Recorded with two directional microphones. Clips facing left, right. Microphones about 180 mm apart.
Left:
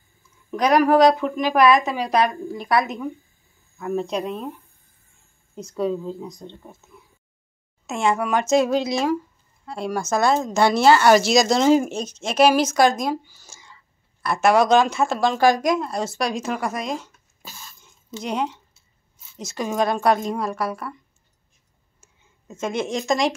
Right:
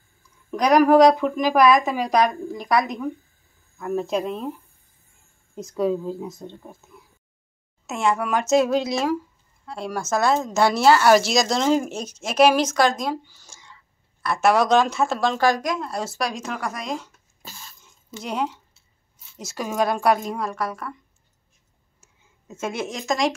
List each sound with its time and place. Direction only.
0.2 s a woman's voice: centre (ahead or behind)
11.9 s a woman's voice: 5° right (ahead or behind)
15.3 s a woman's voice: 15° left (ahead or behind)
15.8 s a woman's voice: 5° right (ahead or behind)
22.0 s speech: 5° right (ahead or behind)